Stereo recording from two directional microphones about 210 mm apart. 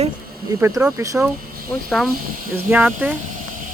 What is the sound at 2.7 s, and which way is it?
Speech, 10° right (ahead or behind).